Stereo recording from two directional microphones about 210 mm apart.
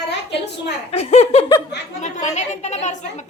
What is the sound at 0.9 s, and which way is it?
A woman's voice, 30° left (ahead or behind).